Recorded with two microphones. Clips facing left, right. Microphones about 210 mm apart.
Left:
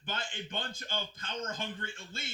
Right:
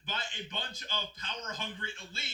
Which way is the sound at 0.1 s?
50° left (ahead or behind).